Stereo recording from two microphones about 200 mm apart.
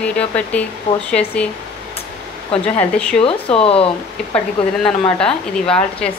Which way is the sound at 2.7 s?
5° left (ahead or behind).